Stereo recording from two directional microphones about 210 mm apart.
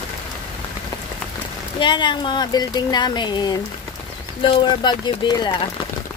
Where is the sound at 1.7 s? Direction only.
20° left (ahead or behind).